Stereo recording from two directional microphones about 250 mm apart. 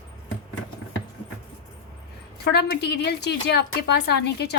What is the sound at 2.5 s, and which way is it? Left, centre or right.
A woman's voice, left.